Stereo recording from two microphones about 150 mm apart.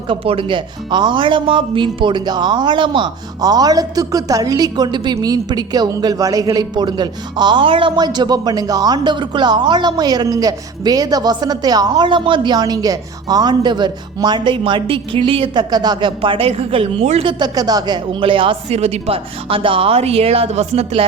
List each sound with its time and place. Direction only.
0.1 s speech: 35° right (ahead or behind)
17.4 s speech: 25° right (ahead or behind); by 21.0 s 45° right (ahead or behind)